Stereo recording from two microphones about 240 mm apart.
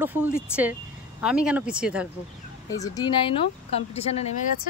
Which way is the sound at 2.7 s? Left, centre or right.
Centre.